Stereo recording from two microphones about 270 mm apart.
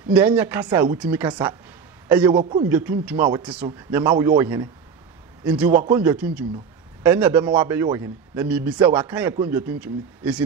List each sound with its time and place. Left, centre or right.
0.1 s a man's voice: centre